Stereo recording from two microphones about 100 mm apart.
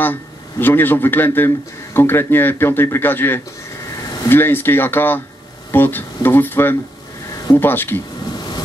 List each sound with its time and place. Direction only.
0.0 s a man's voice: 20° left (ahead or behind)
3.9 s a sound: 35° left (ahead or behind)
4.3 s speech: 20° left (ahead or behind)